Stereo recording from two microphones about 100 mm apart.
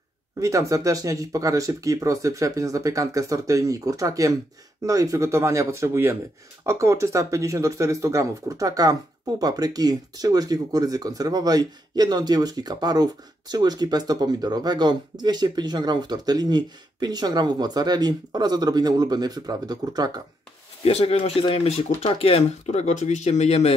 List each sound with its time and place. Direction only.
0.4 s speech: 35° right (ahead or behind)
20.8 s speech: 80° left